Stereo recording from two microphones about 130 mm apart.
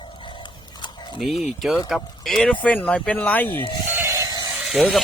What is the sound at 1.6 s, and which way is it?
Speech, centre (ahead or behind).